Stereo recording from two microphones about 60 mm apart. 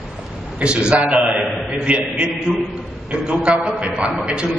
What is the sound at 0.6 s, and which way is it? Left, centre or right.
A man's voice, centre.